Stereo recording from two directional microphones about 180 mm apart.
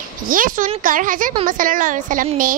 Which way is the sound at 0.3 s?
50° right (ahead or behind).